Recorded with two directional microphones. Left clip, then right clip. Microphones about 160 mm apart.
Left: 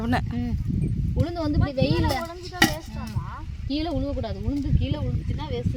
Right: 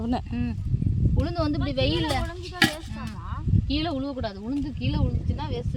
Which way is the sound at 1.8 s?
25° right (ahead or behind).